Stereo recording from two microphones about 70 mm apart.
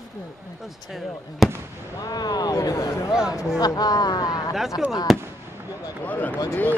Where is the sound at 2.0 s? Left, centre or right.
Left.